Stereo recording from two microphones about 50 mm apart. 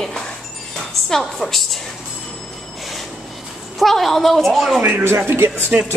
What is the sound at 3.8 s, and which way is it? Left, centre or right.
A woman's voice, centre.